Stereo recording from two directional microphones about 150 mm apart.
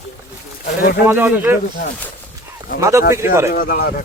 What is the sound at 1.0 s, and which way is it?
Speech, 15° right (ahead or behind).